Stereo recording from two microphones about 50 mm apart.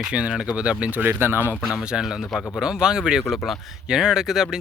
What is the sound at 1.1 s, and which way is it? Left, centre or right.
Speech, right.